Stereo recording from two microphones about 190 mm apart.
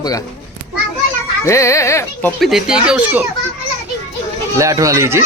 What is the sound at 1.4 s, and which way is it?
Speech, 15° left (ahead or behind).